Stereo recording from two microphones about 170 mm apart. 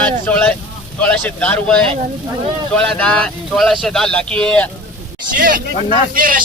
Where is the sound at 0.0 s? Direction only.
10° left (ahead or behind).